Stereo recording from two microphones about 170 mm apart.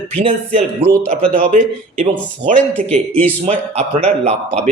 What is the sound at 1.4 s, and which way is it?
Speech, 50° right (ahead or behind).